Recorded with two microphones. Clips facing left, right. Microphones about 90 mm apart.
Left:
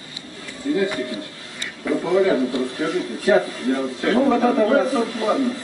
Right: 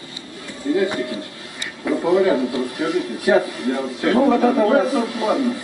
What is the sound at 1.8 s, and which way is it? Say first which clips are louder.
A man's voice: right 2 dB; 15° right (ahead or behind).